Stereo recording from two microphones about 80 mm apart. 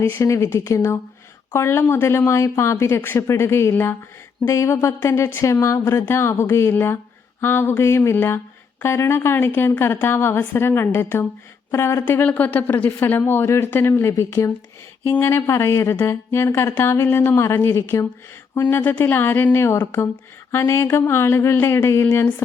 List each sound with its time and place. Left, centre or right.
0.0 s a woman's voice: left
4.4 s a woman's voice: left